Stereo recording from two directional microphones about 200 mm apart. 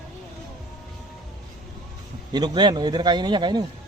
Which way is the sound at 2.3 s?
20° right (ahead or behind).